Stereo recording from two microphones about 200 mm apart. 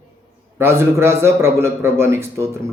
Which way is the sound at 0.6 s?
15° right (ahead or behind).